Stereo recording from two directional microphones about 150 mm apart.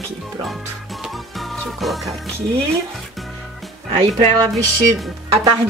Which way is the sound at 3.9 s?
30° right (ahead or behind).